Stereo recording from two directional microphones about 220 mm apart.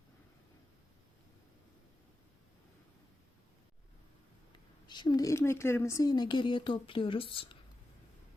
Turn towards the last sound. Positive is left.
turn(degrees=25)  # may be behind; listen again after turning